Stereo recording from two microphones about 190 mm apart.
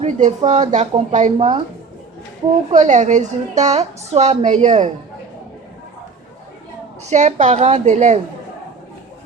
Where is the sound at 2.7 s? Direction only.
40° right (ahead or behind).